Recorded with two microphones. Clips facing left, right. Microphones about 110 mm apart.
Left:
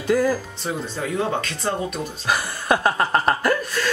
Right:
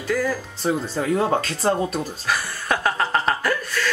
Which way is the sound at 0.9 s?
35° right (ahead or behind).